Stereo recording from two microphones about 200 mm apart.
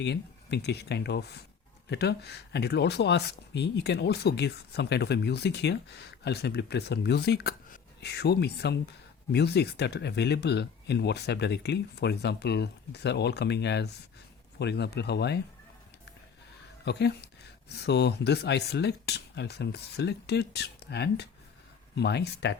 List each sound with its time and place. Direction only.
0.0 s speech: 55° left (ahead or behind)
16.8 s speech: 55° left (ahead or behind)